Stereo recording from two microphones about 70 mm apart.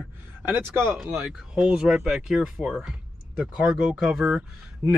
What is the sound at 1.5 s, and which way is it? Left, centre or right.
Speech, centre.